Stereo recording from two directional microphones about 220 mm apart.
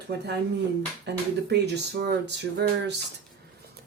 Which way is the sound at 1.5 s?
50° right (ahead or behind).